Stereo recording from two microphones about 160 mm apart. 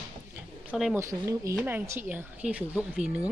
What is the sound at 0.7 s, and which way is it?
Speech, centre (ahead or behind).